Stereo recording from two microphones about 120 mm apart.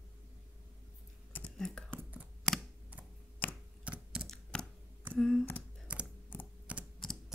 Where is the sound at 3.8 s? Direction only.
10° right (ahead or behind).